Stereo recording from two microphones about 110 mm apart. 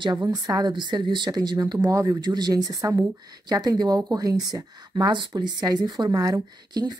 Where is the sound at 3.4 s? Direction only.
40° right (ahead or behind).